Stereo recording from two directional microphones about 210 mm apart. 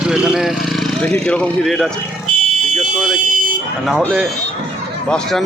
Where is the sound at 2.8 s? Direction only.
Centre (ahead or behind).